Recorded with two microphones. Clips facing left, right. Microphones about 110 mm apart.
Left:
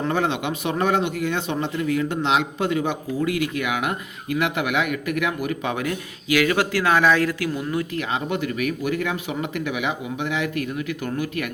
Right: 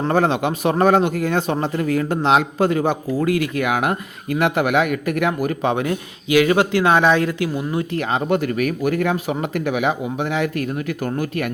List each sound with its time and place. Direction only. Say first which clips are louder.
0.0 s a man's voice: right 5 dB; 40° right (ahead or behind)
8.1 s speech: right 7 dB; 45° right (ahead or behind)